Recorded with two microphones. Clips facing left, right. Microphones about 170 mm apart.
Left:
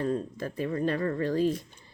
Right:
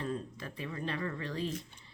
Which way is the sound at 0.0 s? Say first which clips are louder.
Left 8 dB; 45° left (ahead or behind).